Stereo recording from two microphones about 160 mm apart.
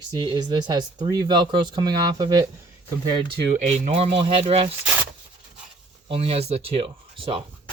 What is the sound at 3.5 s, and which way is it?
Speech, 50° right (ahead or behind).